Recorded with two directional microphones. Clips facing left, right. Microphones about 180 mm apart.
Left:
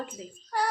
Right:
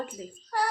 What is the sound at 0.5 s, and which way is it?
Child singing, 5° right (ahead or behind).